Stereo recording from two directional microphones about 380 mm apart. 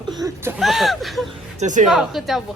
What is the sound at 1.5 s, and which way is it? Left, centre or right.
Speech, centre.